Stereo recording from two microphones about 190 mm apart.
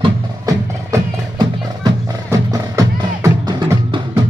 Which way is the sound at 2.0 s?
20° right (ahead or behind).